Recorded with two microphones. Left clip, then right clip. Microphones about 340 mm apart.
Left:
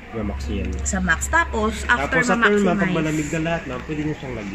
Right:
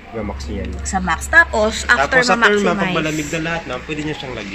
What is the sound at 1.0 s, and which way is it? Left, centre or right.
A woman's voice, centre.